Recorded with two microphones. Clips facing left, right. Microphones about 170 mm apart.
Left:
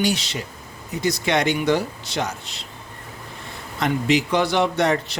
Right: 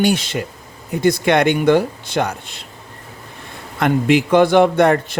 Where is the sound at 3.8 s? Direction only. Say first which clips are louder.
Right 5 dB; 55° right (ahead or behind).